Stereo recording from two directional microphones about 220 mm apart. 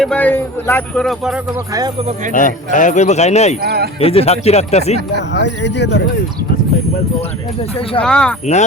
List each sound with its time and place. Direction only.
0.0 s speech: 5° left (ahead or behind)
2.3 s speech: 35° left (ahead or behind)
3.6 s speech: 45° right (ahead or behind)
4.0 s speech: 25° left (ahead or behind)
5.3 s speech: 50° left (ahead or behind)
8.0 s speech: 5° left (ahead or behind)